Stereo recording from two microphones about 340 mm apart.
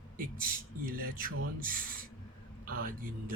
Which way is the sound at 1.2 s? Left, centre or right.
Right.